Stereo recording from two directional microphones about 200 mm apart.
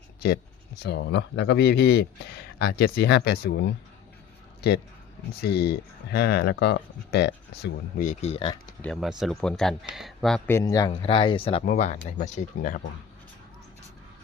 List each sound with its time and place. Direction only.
0.8 s speech: 55° left (ahead or behind)
5.4 s speech: 55° left (ahead or behind)
8.0 s speech: 35° left (ahead or behind)
8.8 s speech: centre (ahead or behind); by 11.6 s 25° left (ahead or behind)
11.6 s speech: 40° left (ahead or behind)